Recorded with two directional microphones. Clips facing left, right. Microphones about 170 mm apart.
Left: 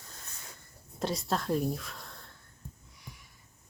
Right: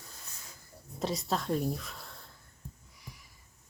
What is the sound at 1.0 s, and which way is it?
Speech, centre (ahead or behind).